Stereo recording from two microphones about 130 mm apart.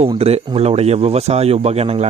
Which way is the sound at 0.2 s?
50° right (ahead or behind).